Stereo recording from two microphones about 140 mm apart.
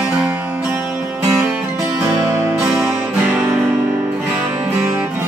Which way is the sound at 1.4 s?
5° right (ahead or behind).